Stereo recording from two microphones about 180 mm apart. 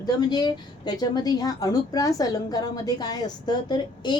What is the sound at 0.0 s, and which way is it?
A woman's voice, 25° left (ahead or behind).